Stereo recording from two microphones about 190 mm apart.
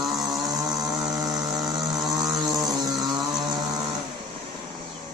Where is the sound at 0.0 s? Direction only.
Centre (ahead or behind).